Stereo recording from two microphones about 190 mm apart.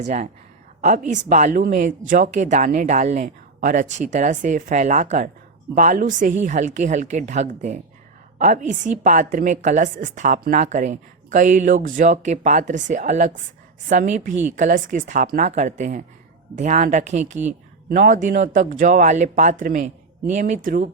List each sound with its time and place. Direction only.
0.0 s a woman's voice: 35° right (ahead or behind)
17.4 s a woman's voice: 50° right (ahead or behind)